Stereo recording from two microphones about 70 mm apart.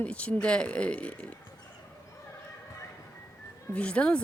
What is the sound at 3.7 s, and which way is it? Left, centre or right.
Speech, centre.